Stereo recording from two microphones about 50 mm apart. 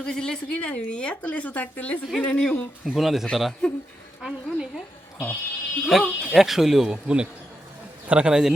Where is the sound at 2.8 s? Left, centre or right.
Centre.